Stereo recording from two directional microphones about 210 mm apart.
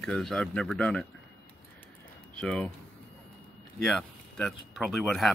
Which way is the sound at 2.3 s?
5° left (ahead or behind).